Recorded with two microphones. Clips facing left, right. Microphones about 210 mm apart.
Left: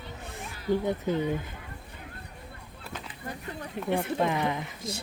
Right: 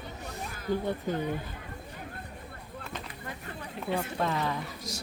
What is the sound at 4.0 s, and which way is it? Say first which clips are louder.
Speech: left 3 dB; 15° left (ahead or behind).